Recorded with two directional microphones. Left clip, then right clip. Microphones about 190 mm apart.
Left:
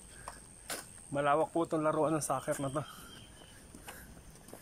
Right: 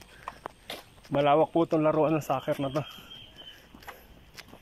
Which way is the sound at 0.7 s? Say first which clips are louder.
Right 4 dB; 15° right (ahead or behind).